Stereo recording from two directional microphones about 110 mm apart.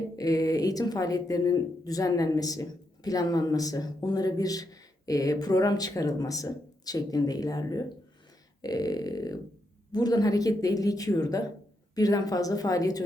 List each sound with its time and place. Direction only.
0.2 s speech: 35° left (ahead or behind)